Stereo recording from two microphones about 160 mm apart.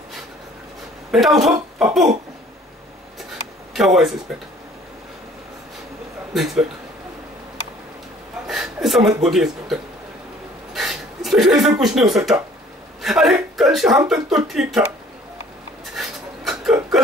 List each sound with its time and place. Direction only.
1.1 s speech: centre (ahead or behind)
1.5 s speech: 20° right (ahead or behind)
3.7 s speech: centre (ahead or behind)
6.3 s speech: centre (ahead or behind)
8.5 s chuckle: 5° right (ahead or behind)
9.2 s speech: centre (ahead or behind)
10.7 s a sound: centre (ahead or behind)
13.0 s a man's voice: centre (ahead or behind)
15.8 s a sound: centre (ahead or behind)